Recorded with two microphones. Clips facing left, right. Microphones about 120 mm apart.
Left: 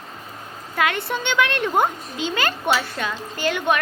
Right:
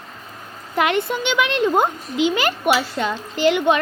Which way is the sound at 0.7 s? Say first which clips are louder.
Right 3 dB; 20° right (ahead or behind).